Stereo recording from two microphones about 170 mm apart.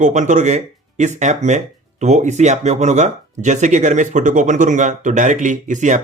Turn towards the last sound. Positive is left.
turn(degrees=-45)  # may be behind; listen again after turning